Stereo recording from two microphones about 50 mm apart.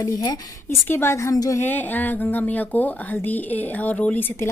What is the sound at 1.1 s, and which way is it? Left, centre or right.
Speech, left.